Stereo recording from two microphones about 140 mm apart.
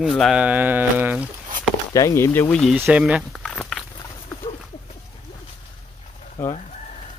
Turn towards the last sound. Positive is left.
turn(degrees=20)  # may be behind; listen again after turning